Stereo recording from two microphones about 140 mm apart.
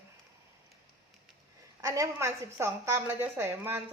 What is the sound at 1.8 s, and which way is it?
A woman's voice, 25° right (ahead or behind).